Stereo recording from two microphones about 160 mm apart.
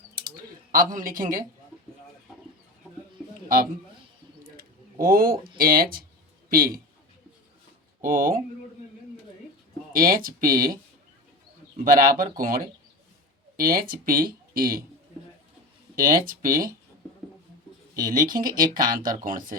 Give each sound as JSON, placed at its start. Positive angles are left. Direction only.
{"t": 0.2, "sound": "typing", "side_deg": -60}
{"t": 3.2, "sound": "a sound", "side_deg": 5}
{"t": 4.5, "sound": "speech", "side_deg": -60}
{"t": 8.0, "sound": "speech", "side_deg": -60}
{"t": 9.9, "sound": "speech", "side_deg": -60}
{"t": 11.8, "sound": "speech", "side_deg": -60}
{"t": 16.0, "sound": "speech", "side_deg": -60}
{"t": 18.0, "sound": "speech", "side_deg": -60}